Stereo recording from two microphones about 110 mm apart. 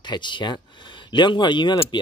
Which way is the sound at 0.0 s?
45° left (ahead or behind).